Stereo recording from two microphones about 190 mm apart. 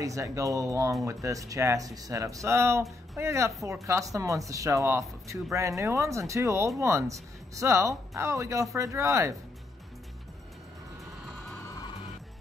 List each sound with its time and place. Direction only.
0.0 s speech: 15° right (ahead or behind)